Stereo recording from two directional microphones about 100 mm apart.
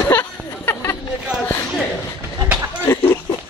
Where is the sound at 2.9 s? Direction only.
25° left (ahead or behind).